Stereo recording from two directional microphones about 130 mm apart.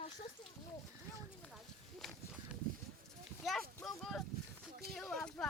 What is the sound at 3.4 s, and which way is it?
Speech, centre (ahead or behind).